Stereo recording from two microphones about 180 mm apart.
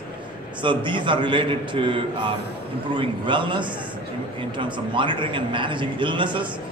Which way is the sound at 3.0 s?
25° right (ahead or behind).